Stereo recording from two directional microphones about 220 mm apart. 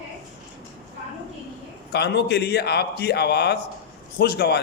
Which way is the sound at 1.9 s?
50° left (ahead or behind).